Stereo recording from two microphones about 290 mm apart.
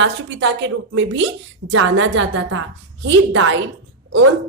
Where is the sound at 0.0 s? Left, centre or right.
Right.